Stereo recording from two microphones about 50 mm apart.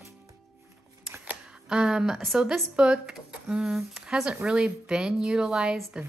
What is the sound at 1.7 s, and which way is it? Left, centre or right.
Speech, centre.